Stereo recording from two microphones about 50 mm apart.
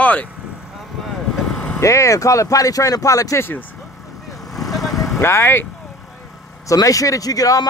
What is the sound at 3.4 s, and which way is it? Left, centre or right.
Speech, left.